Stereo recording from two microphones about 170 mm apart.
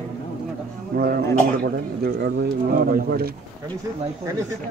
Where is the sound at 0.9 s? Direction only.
65° right (ahead or behind).